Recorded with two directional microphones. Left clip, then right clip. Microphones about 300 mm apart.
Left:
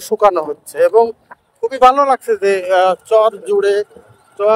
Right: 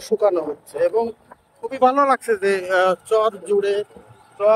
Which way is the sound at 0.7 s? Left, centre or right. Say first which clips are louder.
Left 8 dB; centre.